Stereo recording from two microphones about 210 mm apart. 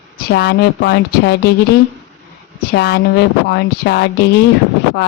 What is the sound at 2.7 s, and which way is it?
Speech, 55° left (ahead or behind).